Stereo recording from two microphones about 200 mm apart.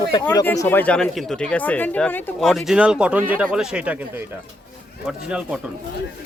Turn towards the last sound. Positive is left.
turn(degrees=-5)  # may be behind; listen again after turning